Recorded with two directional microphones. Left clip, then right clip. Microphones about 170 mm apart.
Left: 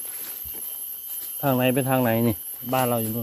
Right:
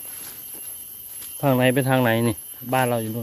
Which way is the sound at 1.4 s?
30° right (ahead or behind).